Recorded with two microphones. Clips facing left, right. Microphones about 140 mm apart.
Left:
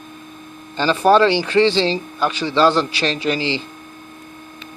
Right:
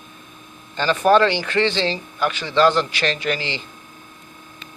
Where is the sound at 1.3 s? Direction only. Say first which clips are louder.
Left 5 dB; 30° left (ahead or behind).